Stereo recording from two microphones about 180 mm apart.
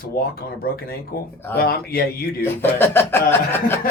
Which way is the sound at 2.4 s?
10° left (ahead or behind).